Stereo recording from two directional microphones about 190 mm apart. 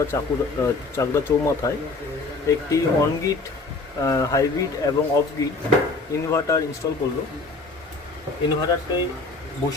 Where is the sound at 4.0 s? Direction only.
15° left (ahead or behind).